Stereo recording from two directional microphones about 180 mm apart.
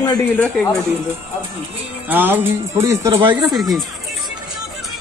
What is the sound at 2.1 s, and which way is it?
Speech, 10° right (ahead or behind).